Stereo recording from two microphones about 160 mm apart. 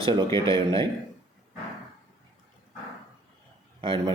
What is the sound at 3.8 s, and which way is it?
Speech, 35° right (ahead or behind).